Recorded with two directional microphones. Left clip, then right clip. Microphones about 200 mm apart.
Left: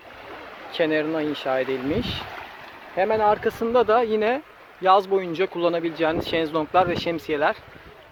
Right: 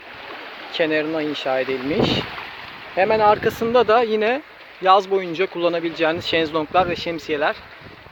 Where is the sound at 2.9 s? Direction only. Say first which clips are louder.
Right 4 dB; 10° right (ahead or behind); by 7.5 s 5° left (ahead or behind).